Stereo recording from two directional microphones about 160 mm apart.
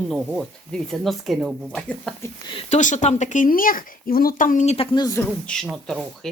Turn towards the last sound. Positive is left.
turn(degrees=0)  # may be behind; listen again after turning